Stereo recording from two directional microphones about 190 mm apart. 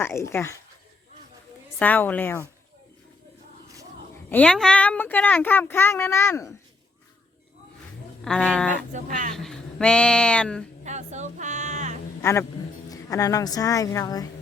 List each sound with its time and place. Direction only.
0.0 s speech: 15° left (ahead or behind)
1.8 s speech: 10° left (ahead or behind)
4.3 s speech: 5° left (ahead or behind)
8.2 s a sound: 5° left (ahead or behind)
8.9 s speech: 40° right (ahead or behind)
9.3 s speech: 5° left (ahead or behind)
10.8 s a sound: 40° right (ahead or behind)
12.2 s a woman's voice: 15° left (ahead or behind)